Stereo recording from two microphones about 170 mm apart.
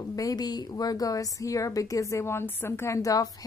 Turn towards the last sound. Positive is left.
turn(degrees=20)  # may be behind; listen again after turning